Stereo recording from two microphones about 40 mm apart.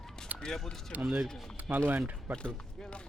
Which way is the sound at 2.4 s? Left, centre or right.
Left.